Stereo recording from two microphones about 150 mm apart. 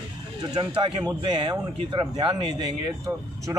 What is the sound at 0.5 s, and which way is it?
Speech, 30° right (ahead or behind).